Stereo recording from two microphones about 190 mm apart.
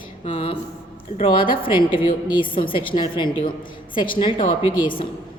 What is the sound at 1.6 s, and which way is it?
A woman's voice, 25° left (ahead or behind).